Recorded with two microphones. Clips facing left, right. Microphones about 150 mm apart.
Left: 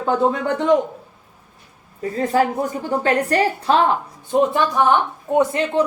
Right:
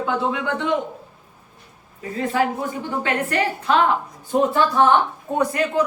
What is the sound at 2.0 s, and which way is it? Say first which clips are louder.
Speech: left 3 dB; 40° left (ahead or behind).